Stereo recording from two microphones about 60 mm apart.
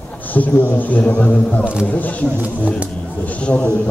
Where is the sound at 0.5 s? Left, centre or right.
Left.